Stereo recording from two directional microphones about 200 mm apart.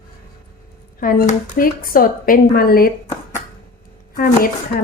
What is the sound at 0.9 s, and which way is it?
Speech, 45° left (ahead or behind).